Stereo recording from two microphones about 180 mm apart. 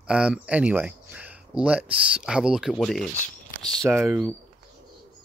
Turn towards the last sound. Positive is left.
turn(degrees=-5)  # may be behind; listen again after turning